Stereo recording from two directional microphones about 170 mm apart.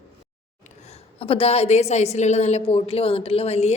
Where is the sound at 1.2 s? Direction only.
35° left (ahead or behind).